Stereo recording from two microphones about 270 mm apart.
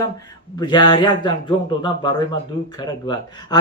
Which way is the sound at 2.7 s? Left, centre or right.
Centre.